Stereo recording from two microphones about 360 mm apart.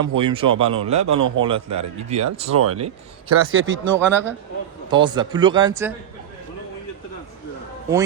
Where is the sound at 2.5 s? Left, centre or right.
Right.